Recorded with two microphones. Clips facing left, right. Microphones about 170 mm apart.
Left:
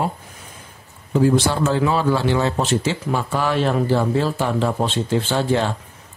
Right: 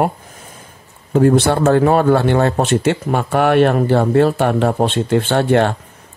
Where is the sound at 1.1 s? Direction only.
60° right (ahead or behind).